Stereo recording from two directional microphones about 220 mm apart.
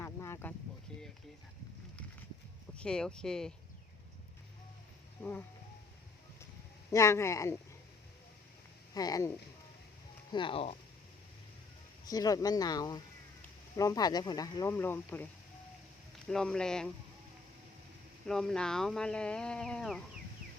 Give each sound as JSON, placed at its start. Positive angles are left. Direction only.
{"t": 0.0, "sound": "a sound", "side_deg": 10}
{"t": 2.7, "sound": "speech", "side_deg": 5}
{"t": 6.9, "sound": "speech", "side_deg": 15}
{"t": 9.0, "sound": "speech", "side_deg": 15}
{"t": 10.3, "sound": "speech", "side_deg": 25}
{"t": 12.0, "sound": "speech", "side_deg": 15}
{"t": 16.3, "sound": "speech", "side_deg": 5}
{"t": 18.3, "sound": "speech", "side_deg": 0}